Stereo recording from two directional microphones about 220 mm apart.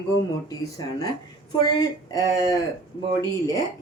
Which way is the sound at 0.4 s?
15° left (ahead or behind).